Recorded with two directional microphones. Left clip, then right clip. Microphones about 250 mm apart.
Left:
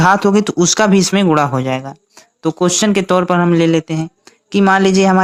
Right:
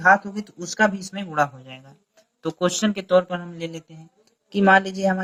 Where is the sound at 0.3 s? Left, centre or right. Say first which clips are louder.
Left 11 dB; left.